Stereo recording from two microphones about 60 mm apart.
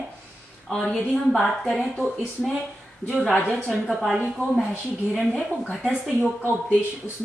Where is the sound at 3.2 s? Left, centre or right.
Left.